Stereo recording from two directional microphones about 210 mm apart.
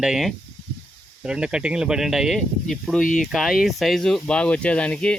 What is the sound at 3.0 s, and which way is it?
Speech, 40° left (ahead or behind).